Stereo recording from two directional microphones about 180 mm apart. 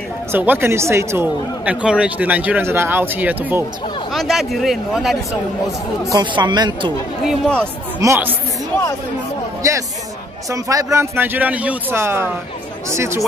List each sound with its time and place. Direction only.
0.3 s speech: 10° right (ahead or behind)
6.1 s speech: 25° right (ahead or behind)
7.2 s speech: 5° left (ahead or behind)
8.0 s speech: 15° right (ahead or behind)
9.6 s speech: 20° right (ahead or behind)